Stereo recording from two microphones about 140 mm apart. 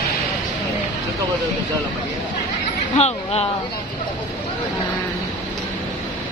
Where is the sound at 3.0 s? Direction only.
45° left (ahead or behind).